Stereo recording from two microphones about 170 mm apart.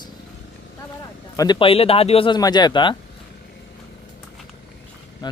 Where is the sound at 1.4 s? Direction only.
30° left (ahead or behind).